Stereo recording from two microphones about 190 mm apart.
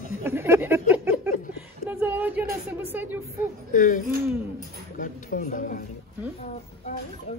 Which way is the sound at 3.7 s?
45° left (ahead or behind).